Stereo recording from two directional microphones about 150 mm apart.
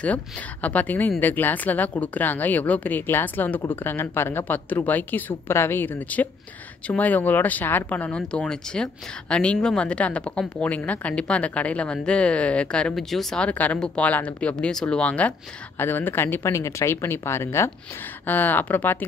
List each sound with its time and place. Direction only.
0.0 s speech: 10° left (ahead or behind)